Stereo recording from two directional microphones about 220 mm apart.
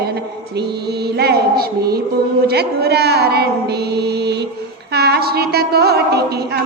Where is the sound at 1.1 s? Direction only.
45° right (ahead or behind).